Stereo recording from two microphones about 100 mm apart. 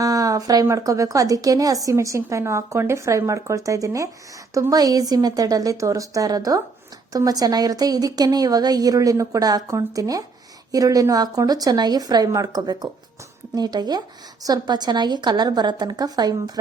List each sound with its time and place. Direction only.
0.0 s a woman's voice: 35° right (ahead or behind)